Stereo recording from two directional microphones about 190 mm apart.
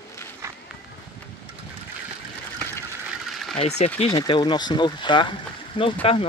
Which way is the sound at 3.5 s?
35° left (ahead or behind).